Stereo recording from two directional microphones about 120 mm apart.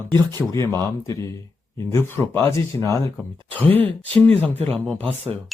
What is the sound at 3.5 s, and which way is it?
Speech, 15° left (ahead or behind).